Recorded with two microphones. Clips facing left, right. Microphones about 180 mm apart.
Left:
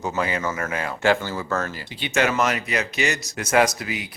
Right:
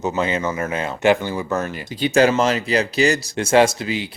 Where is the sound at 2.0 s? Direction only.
35° right (ahead or behind).